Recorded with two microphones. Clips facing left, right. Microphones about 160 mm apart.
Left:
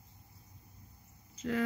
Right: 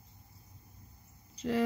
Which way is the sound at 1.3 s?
30° right (ahead or behind).